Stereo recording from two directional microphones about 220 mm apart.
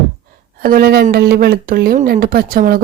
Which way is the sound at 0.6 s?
40° right (ahead or behind).